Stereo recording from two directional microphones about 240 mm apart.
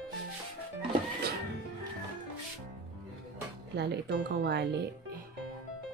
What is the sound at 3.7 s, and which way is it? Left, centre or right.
Speech, right.